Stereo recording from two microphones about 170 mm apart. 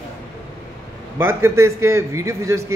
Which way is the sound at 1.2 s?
15° right (ahead or behind).